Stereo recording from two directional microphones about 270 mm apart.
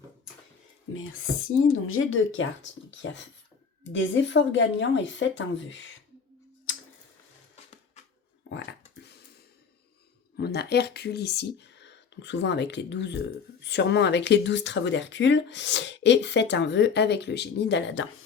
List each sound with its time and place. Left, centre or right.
1.9 s speech: left
9.0 s a sound: left
10.3 s speech: left